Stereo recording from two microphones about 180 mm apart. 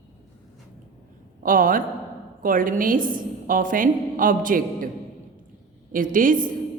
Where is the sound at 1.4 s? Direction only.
50° right (ahead or behind).